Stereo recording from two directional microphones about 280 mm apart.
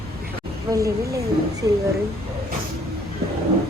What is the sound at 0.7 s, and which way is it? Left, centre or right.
Speech, centre.